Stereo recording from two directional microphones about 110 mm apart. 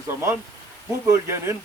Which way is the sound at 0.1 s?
20° right (ahead or behind).